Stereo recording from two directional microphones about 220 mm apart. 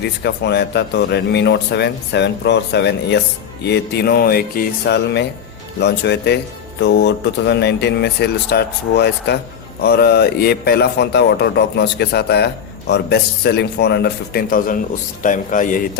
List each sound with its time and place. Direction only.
0.0 s speech: 50° left (ahead or behind)